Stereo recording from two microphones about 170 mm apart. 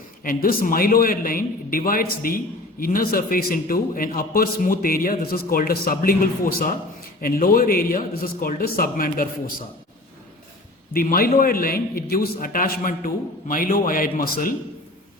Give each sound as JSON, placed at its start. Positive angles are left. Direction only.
{"t": 0.3, "sound": "a man's voice", "side_deg": 55}
{"t": 10.9, "sound": "a man's voice", "side_deg": 55}